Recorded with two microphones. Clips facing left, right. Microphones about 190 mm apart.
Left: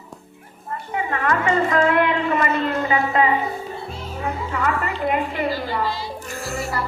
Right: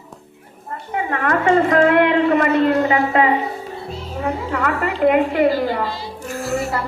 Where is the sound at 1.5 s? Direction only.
60° right (ahead or behind).